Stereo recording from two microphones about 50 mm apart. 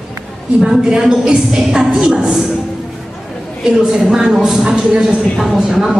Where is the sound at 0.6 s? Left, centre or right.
Centre.